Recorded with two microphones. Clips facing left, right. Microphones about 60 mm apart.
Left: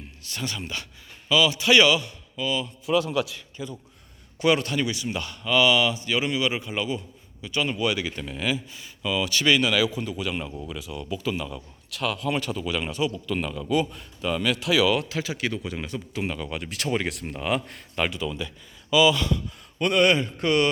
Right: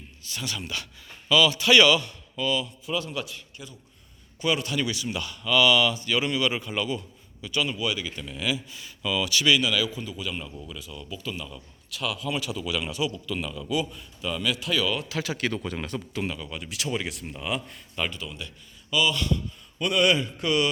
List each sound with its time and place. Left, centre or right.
0.4 s speech: left; by 2.6 s centre
2.8 s a man's voice: left
4.4 s speech: left
4.7 s speech: left
7.7 s speech: left
8.2 s a man's voice: left
9.0 s speech: left
9.6 s speech: left
10.7 s a man's voice: left
13.1 s a man's voice: left
15.2 s speech: centre
16.4 s speech: left
19.8 s a man's voice: left